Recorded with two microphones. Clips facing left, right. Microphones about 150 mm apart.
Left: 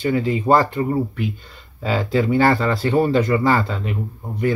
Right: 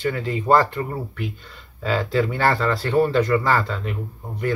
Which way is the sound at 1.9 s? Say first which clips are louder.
Left 2 dB; 15° left (ahead or behind).